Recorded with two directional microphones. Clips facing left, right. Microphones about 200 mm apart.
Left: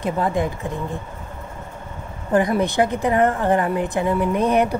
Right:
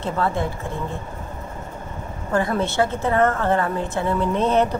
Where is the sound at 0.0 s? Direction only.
15° left (ahead or behind).